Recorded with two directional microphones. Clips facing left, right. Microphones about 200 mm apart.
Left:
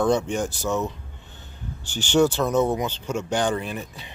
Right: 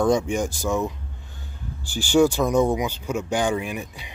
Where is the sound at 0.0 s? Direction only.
10° right (ahead or behind).